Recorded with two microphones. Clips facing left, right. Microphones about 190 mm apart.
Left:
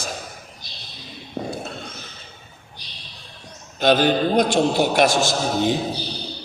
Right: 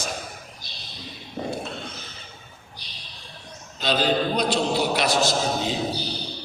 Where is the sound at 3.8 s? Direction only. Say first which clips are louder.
Left 5 dB; 50° left (ahead or behind).